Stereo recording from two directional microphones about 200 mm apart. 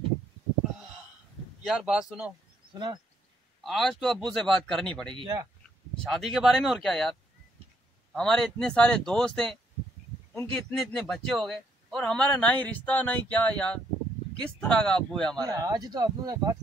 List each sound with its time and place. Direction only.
1.6 s speech: 5° right (ahead or behind)
2.7 s speech: 20° right (ahead or behind)
3.6 s speech: centre (ahead or behind)
5.1 s speech: 25° right (ahead or behind)
6.0 s speech: centre (ahead or behind)
15.4 s speech: 20° right (ahead or behind)